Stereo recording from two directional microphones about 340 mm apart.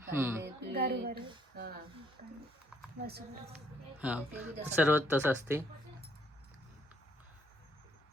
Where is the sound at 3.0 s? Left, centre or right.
Right.